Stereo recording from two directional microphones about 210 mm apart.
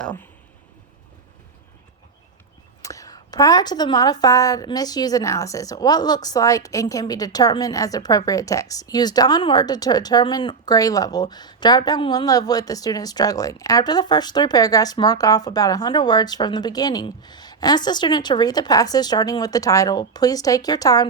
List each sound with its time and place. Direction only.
2.8 s a woman's voice: 15° left (ahead or behind)